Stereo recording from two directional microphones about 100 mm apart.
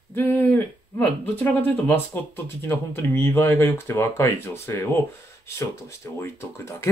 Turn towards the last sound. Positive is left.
turn(degrees=25)  # may be behind; listen again after turning